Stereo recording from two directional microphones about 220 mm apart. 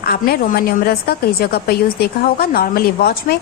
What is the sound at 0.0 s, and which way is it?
A woman's voice, 45° left (ahead or behind).